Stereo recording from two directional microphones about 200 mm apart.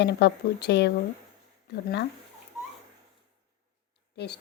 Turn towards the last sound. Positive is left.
turn(degrees=55)  # may be behind; listen again after turning